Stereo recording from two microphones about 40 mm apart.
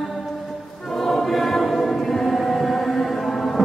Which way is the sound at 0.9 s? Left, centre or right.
Centre.